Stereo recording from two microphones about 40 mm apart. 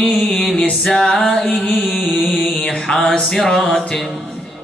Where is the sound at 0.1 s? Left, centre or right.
Left.